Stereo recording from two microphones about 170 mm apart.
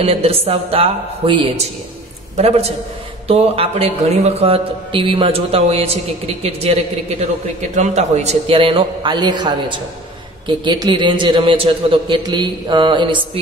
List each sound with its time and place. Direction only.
0.0 s a man's voice: 35° right (ahead or behind)